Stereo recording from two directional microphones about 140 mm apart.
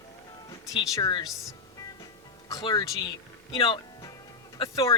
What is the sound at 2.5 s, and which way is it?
Speech, 25° left (ahead or behind).